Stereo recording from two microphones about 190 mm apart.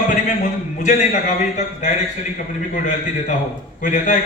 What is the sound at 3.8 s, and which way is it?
Speech, 45° left (ahead or behind).